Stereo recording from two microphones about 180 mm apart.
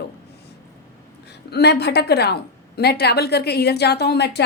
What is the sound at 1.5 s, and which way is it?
A woman's voice, 65° left (ahead or behind).